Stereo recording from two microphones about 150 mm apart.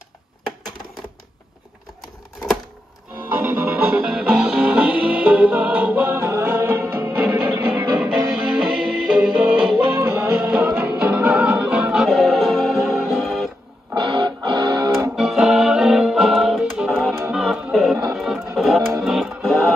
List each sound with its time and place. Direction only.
3.2 s music: 15° right (ahead or behind); by 13.5 s centre (ahead or behind)
13.9 s music: 30° right (ahead or behind)
15.1 s music: centre (ahead or behind)